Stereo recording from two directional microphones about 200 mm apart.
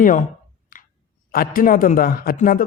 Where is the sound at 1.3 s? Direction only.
45° left (ahead or behind).